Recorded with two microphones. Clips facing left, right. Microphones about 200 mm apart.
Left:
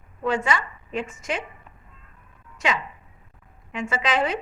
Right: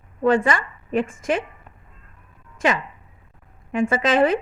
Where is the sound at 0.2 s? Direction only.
50° right (ahead or behind).